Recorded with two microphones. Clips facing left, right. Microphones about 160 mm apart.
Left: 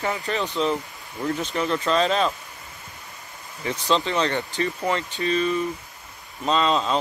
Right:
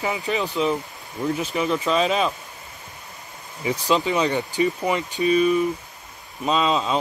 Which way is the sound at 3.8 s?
10° right (ahead or behind).